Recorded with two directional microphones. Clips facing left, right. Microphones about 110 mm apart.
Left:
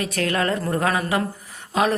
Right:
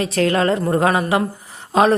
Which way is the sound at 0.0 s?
30° right (ahead or behind).